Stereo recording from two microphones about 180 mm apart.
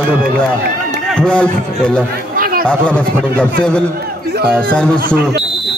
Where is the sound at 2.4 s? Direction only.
55° right (ahead or behind).